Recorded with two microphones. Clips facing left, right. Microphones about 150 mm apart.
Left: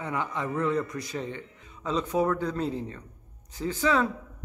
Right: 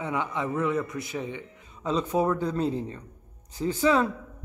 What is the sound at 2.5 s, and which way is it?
Speech, 25° right (ahead or behind).